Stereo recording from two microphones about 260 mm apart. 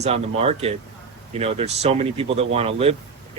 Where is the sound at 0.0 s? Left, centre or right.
Right.